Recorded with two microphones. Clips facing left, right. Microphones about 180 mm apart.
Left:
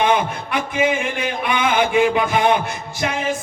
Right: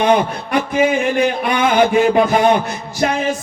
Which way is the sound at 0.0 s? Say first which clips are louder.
Right 4 dB; 45° right (ahead or behind).